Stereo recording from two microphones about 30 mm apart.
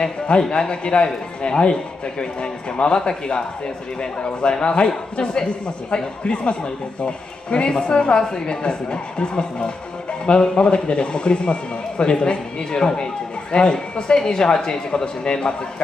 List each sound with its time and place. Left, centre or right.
0.0 s a man's voice: left
4.0 s a man's voice: left